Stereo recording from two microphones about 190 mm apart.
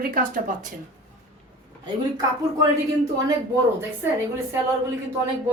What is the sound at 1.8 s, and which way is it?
Speech, 20° right (ahead or behind).